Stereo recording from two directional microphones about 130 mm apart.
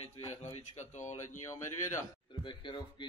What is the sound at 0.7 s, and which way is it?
Speech, 70° left (ahead or behind).